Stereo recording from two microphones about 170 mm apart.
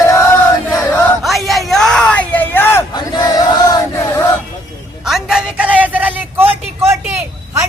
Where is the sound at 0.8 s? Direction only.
15° left (ahead or behind).